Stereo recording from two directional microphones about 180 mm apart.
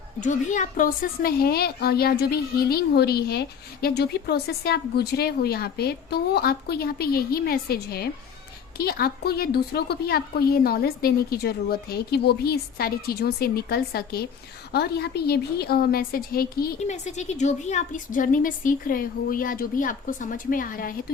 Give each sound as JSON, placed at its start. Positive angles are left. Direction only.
{"t": 0.2, "sound": "a woman's voice", "side_deg": 45}
{"t": 16.8, "sound": "a woman's voice", "side_deg": 40}